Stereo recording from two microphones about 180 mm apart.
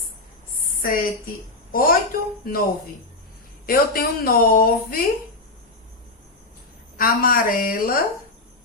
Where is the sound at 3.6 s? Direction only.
55° left (ahead or behind).